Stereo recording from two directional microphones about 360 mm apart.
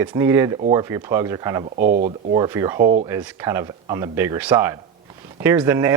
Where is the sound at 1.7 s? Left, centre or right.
Right.